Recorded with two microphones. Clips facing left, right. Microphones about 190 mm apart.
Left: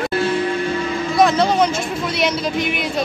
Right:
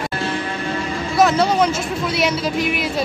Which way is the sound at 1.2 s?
5° right (ahead or behind).